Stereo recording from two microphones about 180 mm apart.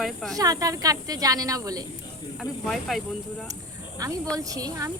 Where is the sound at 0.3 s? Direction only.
20° right (ahead or behind).